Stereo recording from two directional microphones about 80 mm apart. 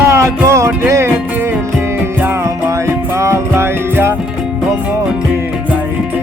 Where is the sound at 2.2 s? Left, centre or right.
Right.